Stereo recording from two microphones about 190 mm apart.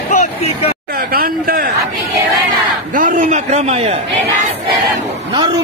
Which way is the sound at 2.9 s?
40° right (ahead or behind).